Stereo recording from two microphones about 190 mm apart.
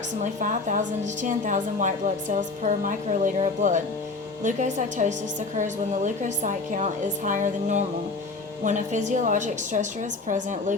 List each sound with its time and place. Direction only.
0.3 s a woman's voice: 45° right (ahead or behind)